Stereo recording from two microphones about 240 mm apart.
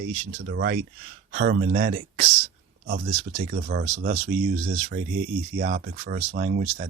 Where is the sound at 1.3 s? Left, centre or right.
Right.